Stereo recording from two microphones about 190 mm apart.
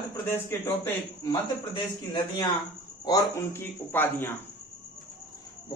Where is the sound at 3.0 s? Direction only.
15° left (ahead or behind).